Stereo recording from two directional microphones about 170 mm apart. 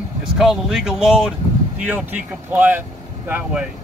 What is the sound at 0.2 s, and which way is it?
Speech, centre (ahead or behind).